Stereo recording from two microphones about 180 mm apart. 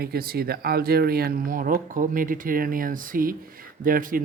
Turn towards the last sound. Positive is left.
turn(degrees=-50)  # may be behind; listen again after turning